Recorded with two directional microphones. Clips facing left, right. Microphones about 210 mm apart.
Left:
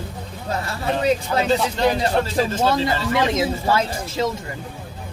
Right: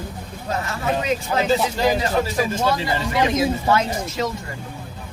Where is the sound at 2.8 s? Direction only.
20° right (ahead or behind).